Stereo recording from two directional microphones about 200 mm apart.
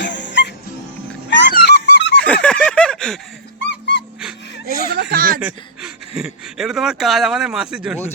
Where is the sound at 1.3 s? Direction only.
60° left (ahead or behind).